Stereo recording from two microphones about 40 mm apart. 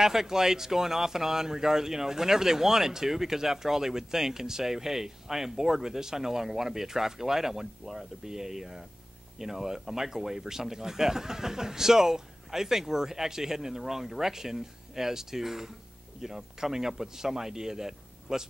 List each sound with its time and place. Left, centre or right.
0.0 s speech: centre